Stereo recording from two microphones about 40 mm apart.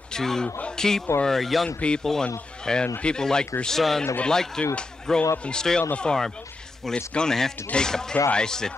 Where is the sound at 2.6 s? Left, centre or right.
Centre.